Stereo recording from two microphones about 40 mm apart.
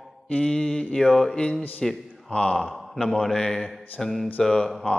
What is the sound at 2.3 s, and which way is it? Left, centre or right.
Speech, left.